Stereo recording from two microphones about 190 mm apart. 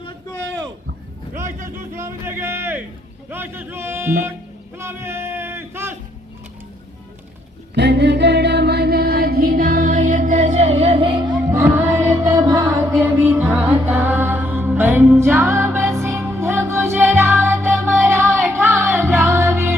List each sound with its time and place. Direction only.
0.0 s a sound: 15° left (ahead or behind)
1.3 s vehicle: 45° right (ahead or behind)
2.0 s a sound: 15° right (ahead or behind)
3.2 s speech: 10° right (ahead or behind)
7.8 s music: 65° right (ahead or behind); by 11.3 s 30° right (ahead or behind)
11.3 s music: 10° right (ahead or behind)